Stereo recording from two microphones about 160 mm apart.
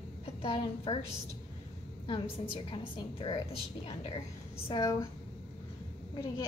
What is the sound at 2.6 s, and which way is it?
A woman's voice, 30° left (ahead or behind).